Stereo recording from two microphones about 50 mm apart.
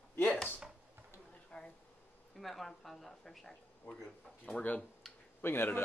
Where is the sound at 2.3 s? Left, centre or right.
Centre.